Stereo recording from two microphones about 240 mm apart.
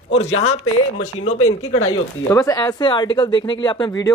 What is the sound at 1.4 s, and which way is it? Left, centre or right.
Speech, left.